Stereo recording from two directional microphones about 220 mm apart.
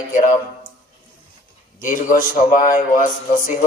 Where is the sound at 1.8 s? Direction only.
40° left (ahead or behind).